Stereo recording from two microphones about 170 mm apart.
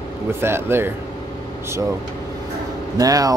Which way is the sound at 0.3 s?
15° right (ahead or behind).